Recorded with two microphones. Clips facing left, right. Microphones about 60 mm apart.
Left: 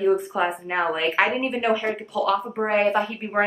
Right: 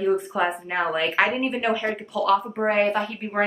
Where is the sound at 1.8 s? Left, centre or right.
Centre.